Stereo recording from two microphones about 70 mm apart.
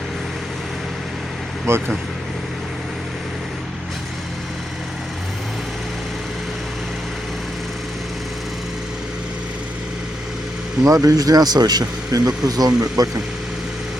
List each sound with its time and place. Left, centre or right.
1.7 s speech: right
10.8 s speech: right